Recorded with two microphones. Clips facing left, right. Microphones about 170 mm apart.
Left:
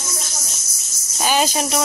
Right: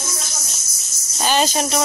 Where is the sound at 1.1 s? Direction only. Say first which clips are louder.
Even; 5° left (ahead or behind).